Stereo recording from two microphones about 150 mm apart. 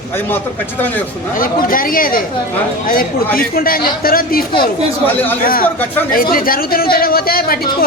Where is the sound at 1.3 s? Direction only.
70° left (ahead or behind).